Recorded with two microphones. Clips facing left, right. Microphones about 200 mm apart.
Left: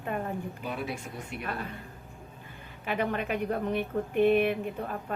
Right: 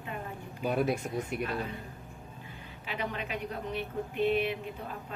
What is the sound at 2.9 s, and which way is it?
A woman's voice, 55° left (ahead or behind).